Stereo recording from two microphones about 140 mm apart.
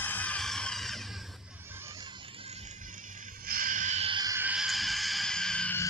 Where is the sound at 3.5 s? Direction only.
80° right; by 4.1 s 55° right (ahead or behind).